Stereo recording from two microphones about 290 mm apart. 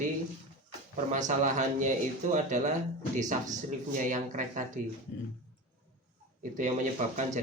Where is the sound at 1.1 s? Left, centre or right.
Right.